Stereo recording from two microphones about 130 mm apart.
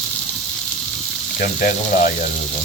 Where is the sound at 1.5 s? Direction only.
75° left (ahead or behind).